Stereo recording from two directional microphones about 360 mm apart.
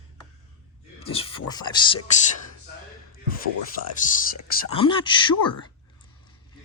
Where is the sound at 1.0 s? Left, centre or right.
Centre.